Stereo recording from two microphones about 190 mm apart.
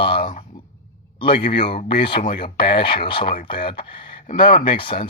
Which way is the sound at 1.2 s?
25° left (ahead or behind).